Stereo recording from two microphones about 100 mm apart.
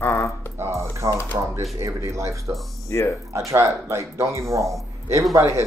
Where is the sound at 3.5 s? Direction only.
30° right (ahead or behind).